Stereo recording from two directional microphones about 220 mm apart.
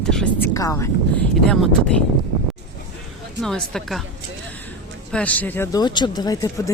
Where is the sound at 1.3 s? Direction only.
Centre (ahead or behind).